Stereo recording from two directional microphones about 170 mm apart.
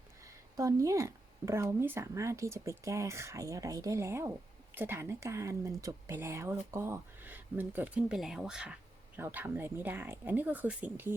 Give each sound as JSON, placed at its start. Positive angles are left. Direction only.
{"t": 0.3, "sound": "speech", "side_deg": -20}